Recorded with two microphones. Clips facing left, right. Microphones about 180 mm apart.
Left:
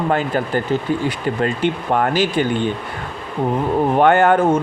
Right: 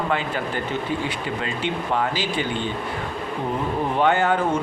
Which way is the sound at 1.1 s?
50° left (ahead or behind).